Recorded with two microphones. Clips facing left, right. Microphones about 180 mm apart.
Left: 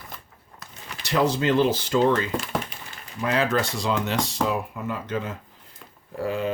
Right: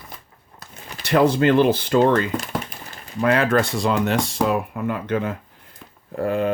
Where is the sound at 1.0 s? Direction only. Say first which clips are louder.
Right 5 dB; 55° right (ahead or behind).